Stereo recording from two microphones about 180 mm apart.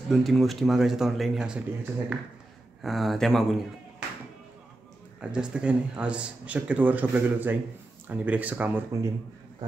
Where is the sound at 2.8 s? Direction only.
Centre (ahead or behind).